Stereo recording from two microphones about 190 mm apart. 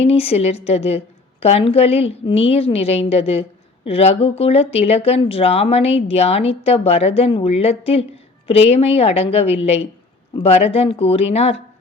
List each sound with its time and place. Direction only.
0.0 s speech: 30° left (ahead or behind)